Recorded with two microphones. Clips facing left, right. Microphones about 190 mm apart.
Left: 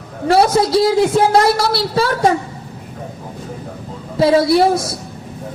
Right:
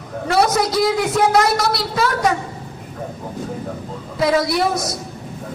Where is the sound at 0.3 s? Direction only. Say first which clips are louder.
Left 4 dB; 30° left (ahead or behind).